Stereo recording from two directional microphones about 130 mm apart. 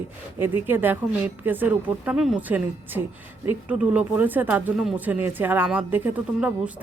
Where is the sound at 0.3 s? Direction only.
15° right (ahead or behind).